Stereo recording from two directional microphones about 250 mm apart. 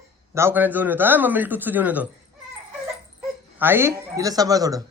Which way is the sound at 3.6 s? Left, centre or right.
Centre.